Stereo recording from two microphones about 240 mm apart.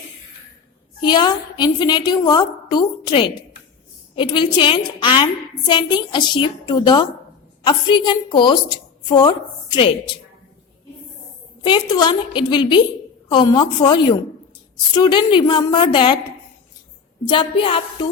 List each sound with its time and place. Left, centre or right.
1.0 s a woman's voice: centre
11.6 s a woman's voice: centre
17.2 s a woman's voice: left